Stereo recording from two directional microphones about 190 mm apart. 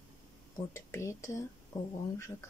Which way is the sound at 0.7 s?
15° left (ahead or behind).